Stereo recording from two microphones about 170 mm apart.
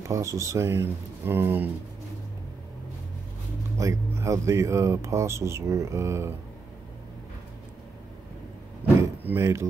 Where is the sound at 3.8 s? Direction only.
15° right (ahead or behind).